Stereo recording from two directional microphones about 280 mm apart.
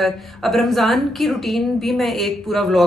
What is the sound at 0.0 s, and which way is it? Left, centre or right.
A woman's voice, centre.